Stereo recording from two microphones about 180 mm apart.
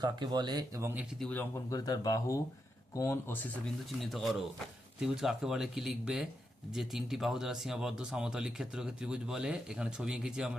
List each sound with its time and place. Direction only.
0.0 s speech: 25° right (ahead or behind)
1.2 s speech: 10° left (ahead or behind)
1.8 s speech: 20° left (ahead or behind)
4.0 s speech: centre (ahead or behind)